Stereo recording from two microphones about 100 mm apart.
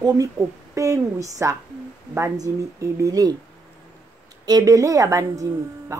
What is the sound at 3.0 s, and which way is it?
Speech, 35° right (ahead or behind).